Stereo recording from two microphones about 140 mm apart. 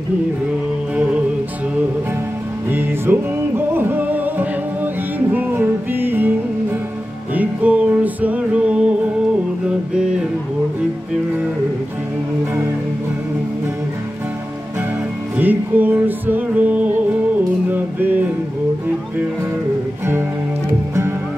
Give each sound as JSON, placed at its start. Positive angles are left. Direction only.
{"t": 2.7, "sound": "music", "side_deg": -15}
{"t": 7.3, "sound": "music", "side_deg": -10}
{"t": 15.3, "sound": "music", "side_deg": -15}